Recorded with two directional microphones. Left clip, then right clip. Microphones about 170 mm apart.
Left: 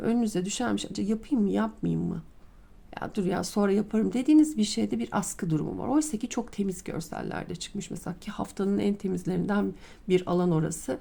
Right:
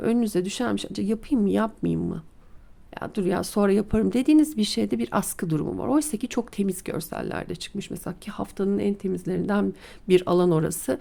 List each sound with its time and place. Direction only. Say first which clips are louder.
0.0 s speech: right 4 dB; 25° right (ahead or behind)
10.1 s speech: right 6 dB; 35° right (ahead or behind)